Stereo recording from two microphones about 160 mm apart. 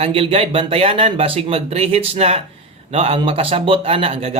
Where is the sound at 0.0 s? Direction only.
35° right (ahead or behind).